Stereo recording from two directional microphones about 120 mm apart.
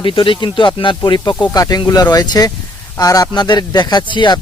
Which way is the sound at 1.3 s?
30° left (ahead or behind).